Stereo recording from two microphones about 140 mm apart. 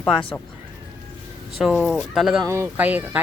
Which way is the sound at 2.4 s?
20° right (ahead or behind).